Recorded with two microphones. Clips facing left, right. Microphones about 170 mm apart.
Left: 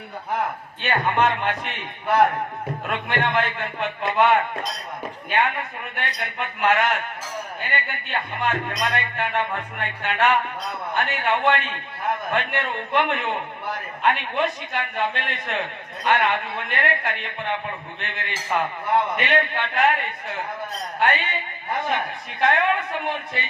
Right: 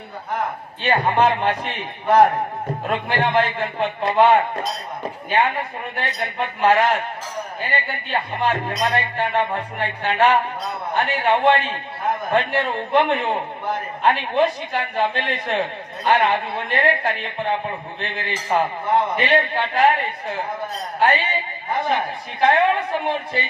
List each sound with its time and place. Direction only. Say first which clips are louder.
0.8 s a man's voice: right 3 dB; 30° right (ahead or behind)